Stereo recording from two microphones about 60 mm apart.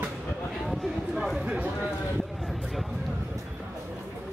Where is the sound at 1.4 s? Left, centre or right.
Centre.